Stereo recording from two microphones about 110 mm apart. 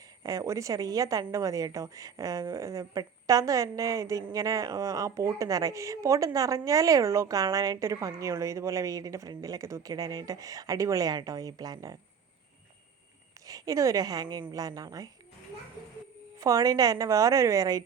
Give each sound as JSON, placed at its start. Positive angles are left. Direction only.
{"t": 0.2, "sound": "a woman's voice", "side_deg": -30}
{"t": 13.5, "sound": "a woman's voice", "side_deg": -30}
{"t": 16.4, "sound": "a woman's voice", "side_deg": -35}